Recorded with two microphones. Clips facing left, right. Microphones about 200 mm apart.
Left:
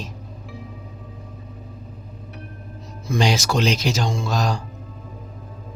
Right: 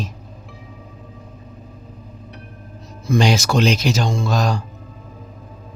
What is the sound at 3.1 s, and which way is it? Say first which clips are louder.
Speech: right 4 dB; 55° right (ahead or behind).